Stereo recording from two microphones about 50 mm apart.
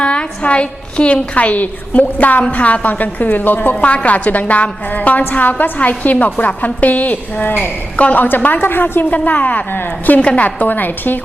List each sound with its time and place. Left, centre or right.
0.0 s a woman's voice: left
9.0 s a woman's voice: left
10.2 s a woman's voice: left
10.4 s a woman's voice: left